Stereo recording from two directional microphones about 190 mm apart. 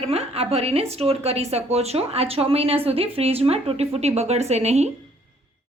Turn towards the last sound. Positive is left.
turn(degrees=-35)  # may be behind; listen again after turning